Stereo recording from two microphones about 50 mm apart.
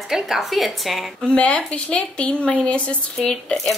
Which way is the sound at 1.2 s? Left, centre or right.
Left.